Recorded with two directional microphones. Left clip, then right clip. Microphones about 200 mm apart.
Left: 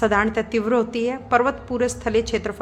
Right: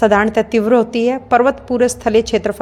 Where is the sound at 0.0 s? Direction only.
30° right (ahead or behind).